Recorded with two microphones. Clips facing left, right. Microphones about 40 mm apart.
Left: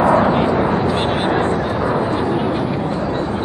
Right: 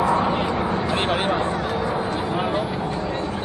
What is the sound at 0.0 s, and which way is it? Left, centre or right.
Bow-wow, left.